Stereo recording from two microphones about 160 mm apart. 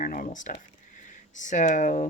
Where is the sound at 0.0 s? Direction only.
55° left (ahead or behind).